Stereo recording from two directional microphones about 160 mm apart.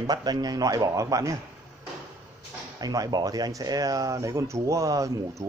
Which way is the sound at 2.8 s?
25° right (ahead or behind).